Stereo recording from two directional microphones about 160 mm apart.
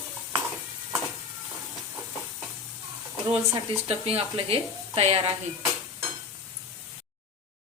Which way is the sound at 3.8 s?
40° right (ahead or behind).